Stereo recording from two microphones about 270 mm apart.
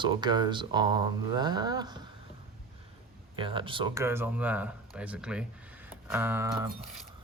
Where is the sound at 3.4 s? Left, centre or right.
Centre.